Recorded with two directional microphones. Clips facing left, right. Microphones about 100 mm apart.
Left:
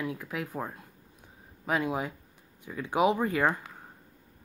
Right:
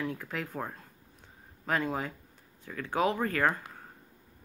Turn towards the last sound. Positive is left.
turn(degrees=15)  # may be behind; listen again after turning